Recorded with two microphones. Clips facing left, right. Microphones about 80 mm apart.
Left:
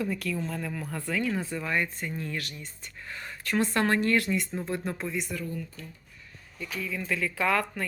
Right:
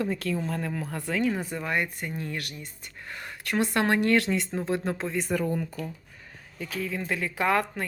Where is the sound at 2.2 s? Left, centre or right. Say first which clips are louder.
Right 1 dB; right.